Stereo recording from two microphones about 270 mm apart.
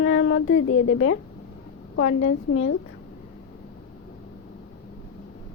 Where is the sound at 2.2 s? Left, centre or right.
Left.